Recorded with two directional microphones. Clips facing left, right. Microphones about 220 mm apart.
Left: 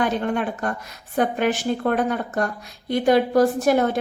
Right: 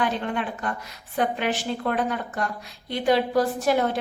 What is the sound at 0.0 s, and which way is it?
A woman's voice, 45° left (ahead or behind).